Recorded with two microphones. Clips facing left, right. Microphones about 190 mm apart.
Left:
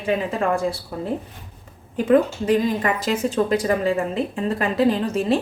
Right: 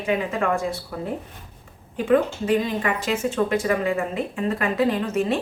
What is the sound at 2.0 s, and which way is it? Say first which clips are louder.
Speech: left 2 dB; 40° left (ahead or behind).